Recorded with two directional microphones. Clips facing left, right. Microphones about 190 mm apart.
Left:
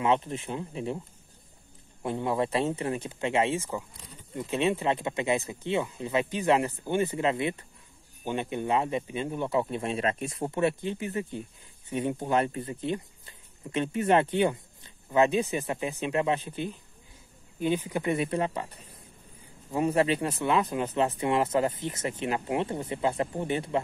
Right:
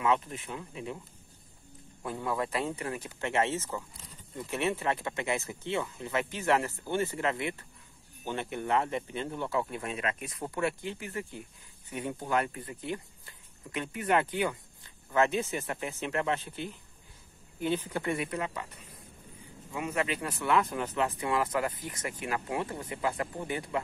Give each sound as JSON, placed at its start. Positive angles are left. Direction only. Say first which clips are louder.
{"t": 0.0, "sound": "speech", "louder": "left 3 dB", "side_deg": 25}
{"t": 2.0, "sound": "speech", "louder": "left 5 dB", "side_deg": 25}